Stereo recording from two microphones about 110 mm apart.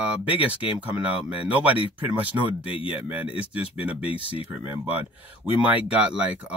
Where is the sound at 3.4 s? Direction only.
10° right (ahead or behind).